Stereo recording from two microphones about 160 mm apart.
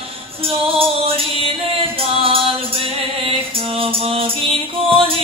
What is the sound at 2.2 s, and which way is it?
Music, 35° right (ahead or behind).